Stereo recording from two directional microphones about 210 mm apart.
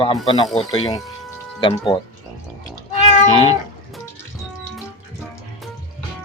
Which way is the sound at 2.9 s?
30° left (ahead or behind).